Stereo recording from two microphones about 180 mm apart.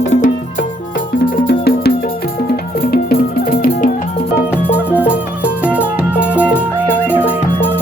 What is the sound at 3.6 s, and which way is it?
Music, 50° left (ahead or behind).